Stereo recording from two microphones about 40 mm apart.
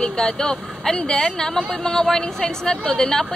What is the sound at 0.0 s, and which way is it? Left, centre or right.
A woman's voice, centre.